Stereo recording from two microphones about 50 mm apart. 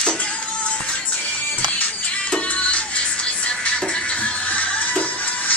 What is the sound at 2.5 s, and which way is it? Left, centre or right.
Music, left.